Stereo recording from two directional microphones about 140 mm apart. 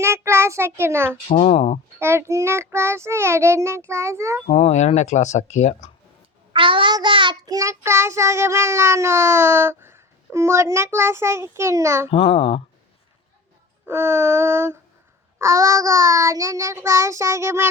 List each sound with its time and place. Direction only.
0.0 s child singing: 20° right (ahead or behind)
1.5 s a child's voice: 45° left (ahead or behind)
2.0 s child singing: 20° right (ahead or behind)
4.4 s speech: 50° left (ahead or behind)
6.5 s child singing: 40° right (ahead or behind); by 12.0 s 20° right (ahead or behind)
12.1 s a child's voice: 40° left (ahead or behind)
13.8 s a sound: 15° right (ahead or behind)
15.4 s child singing: 20° right (ahead or behind)